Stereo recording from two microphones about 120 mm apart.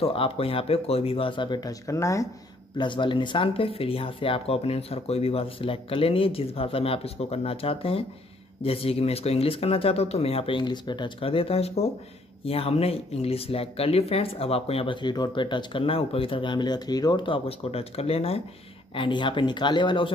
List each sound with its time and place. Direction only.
0.0 s speech: 50° left (ahead or behind); by 2.2 s 25° left (ahead or behind)
2.8 s speech: 45° left (ahead or behind)
18.9 s speech: 40° left (ahead or behind)